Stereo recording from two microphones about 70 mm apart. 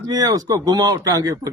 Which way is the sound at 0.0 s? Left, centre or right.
Right.